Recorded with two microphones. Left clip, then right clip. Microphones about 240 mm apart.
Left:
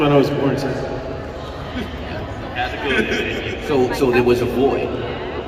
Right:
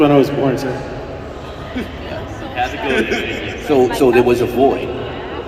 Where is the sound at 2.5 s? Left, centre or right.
Right.